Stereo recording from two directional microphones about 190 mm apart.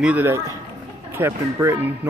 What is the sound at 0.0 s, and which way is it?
Speech, 10° right (ahead or behind).